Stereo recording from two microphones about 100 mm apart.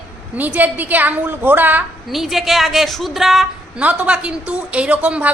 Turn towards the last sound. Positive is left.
turn(degrees=-15)  # may be behind; listen again after turning